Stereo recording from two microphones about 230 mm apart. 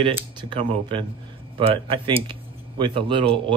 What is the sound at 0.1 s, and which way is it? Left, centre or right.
Speech, centre.